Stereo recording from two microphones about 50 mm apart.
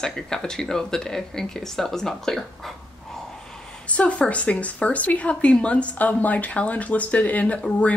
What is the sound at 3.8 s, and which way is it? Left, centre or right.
Speech, left.